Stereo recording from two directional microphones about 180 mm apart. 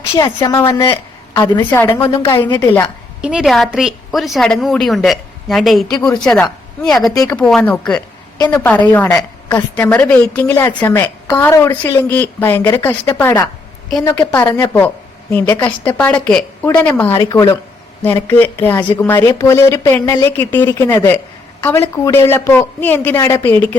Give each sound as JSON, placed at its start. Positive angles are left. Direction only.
{"t": 0.2, "sound": "a woman's voice", "side_deg": 20}
{"t": 3.2, "sound": "a woman's voice", "side_deg": -5}
{"t": 5.9, "sound": "a woman's voice", "side_deg": 20}
{"t": 6.1, "sound": "speech", "side_deg": 5}
{"t": 7.1, "sound": "a woman's voice", "side_deg": 20}
{"t": 7.4, "sound": "a woman's voice", "side_deg": 5}